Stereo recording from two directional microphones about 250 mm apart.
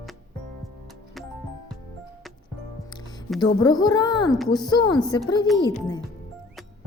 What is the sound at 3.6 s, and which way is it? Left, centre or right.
A woman's voice, centre.